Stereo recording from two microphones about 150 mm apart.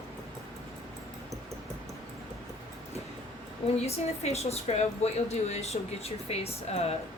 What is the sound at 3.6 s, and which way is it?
A woman's voice, 45° left (ahead or behind).